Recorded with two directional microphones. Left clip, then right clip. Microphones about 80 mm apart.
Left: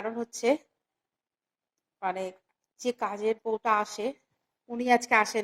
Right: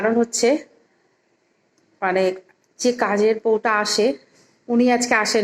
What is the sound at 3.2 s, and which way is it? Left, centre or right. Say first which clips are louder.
Speech: right 11 dB; left.